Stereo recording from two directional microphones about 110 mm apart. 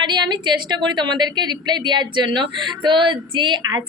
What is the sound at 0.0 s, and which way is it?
A woman's voice, 40° right (ahead or behind).